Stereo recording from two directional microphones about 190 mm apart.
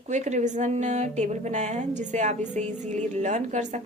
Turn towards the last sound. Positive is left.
turn(degrees=-40)  # may be behind; listen again after turning